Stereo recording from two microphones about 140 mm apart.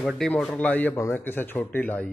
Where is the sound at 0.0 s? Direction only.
Centre (ahead or behind).